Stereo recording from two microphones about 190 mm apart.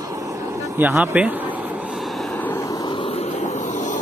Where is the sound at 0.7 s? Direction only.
10° right (ahead or behind).